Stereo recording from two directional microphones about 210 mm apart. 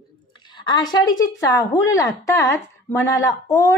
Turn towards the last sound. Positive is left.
turn(degrees=15)  # may be behind; listen again after turning